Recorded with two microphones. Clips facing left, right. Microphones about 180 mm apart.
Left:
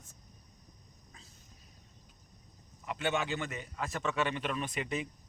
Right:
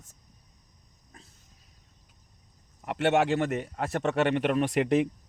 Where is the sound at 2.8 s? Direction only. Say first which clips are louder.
Right 9 dB; 75° right (ahead or behind).